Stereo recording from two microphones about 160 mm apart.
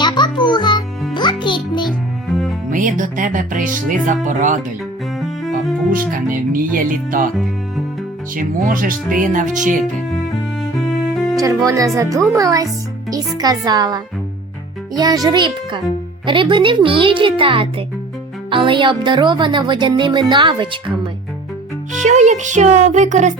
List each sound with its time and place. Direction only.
0.0 s music: 30° left (ahead or behind)
2.6 s speech: 55° right (ahead or behind)
5.9 s speech: 60° right (ahead or behind)
8.4 s speech: 55° right (ahead or behind)
10.8 s music: centre (ahead or behind)
11.3 s a woman's voice: 20° right (ahead or behind)
21.9 s speech: 50° right (ahead or behind)